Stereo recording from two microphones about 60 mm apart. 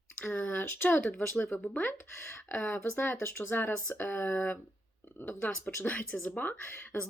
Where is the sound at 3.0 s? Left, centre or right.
Left.